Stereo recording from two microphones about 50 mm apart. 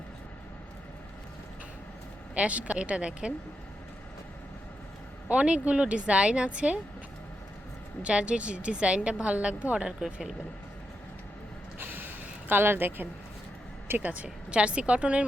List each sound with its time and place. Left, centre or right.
2.3 s a woman's voice: right
5.3 s a woman's voice: right
8.0 s a woman's voice: right
11.8 s a sound: right
14.0 s a woman's voice: right